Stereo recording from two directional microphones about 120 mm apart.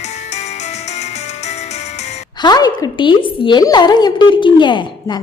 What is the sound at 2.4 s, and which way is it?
A woman's voice, 35° left (ahead or behind).